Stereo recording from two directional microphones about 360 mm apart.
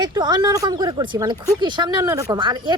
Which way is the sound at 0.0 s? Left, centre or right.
Centre.